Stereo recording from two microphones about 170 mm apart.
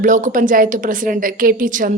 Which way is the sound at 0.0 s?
50° right (ahead or behind).